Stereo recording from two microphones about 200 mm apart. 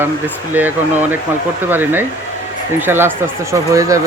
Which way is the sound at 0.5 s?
10° right (ahead or behind).